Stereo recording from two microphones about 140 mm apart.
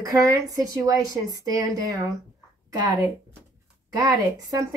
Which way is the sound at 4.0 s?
25° right (ahead or behind).